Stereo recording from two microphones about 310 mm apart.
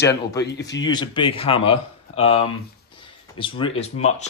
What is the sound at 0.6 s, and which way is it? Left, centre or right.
Speech, left.